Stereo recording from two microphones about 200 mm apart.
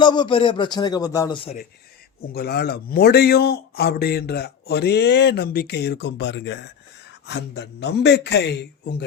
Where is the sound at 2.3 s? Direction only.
50° left (ahead or behind).